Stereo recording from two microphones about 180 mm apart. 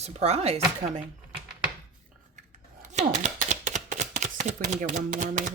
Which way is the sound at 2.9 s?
40° right (ahead or behind).